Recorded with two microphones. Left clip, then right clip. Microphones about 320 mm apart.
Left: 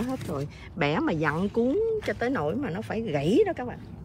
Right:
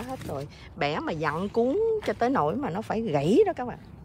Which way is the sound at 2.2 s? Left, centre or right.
Centre.